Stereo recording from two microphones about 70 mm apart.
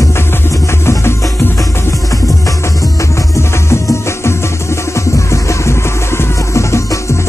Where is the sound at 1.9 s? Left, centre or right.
Left.